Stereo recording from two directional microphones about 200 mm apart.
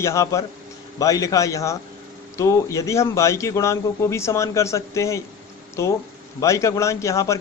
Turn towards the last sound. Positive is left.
turn(degrees=15)  # may be behind; listen again after turning